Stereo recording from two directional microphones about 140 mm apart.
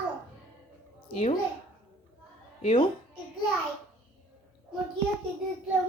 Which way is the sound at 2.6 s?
40° left (ahead or behind).